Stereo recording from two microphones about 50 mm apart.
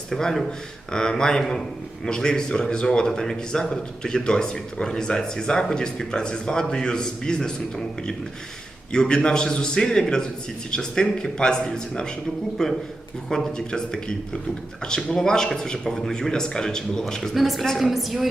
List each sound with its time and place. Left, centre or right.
0.1 s a man's voice: centre
8.9 s a man's voice: centre
17.3 s a woman's voice: centre